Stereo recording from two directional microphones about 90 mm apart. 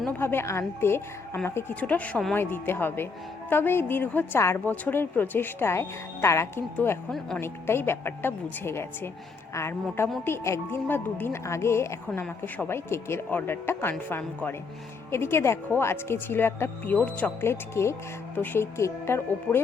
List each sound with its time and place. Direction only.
0.1 s speech: 25° left (ahead or behind)
1.8 s speech: 15° left (ahead or behind)
10.2 s speech: 30° left (ahead or behind)